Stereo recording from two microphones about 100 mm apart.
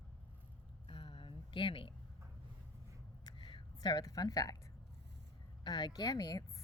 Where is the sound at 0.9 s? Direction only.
55° left (ahead or behind).